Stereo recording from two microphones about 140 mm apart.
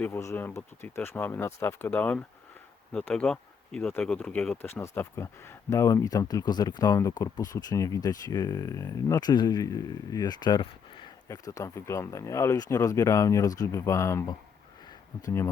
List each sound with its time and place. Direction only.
0.0 s speech: 20° left (ahead or behind)
11.3 s speech: 25° left (ahead or behind)